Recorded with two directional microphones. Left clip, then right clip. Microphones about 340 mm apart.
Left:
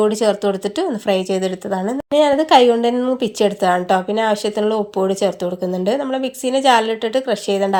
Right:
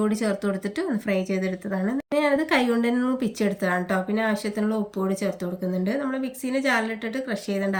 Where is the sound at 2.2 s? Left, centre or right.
Centre.